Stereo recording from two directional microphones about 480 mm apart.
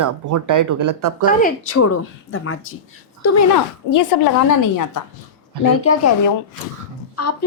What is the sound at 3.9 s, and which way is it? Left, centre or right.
Speech, left.